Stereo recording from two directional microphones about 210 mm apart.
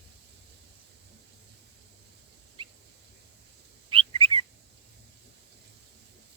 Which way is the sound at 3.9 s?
25° right (ahead or behind).